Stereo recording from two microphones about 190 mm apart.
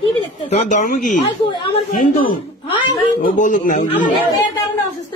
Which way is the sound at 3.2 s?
40° left (ahead or behind).